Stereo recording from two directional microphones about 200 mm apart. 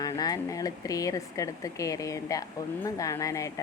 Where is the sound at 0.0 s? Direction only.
20° left (ahead or behind).